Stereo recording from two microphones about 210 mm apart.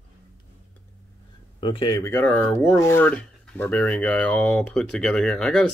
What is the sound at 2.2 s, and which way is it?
Speech, 5° left (ahead or behind).